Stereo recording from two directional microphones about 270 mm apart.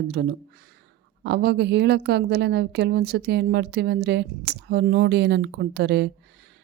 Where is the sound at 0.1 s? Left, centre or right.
Right.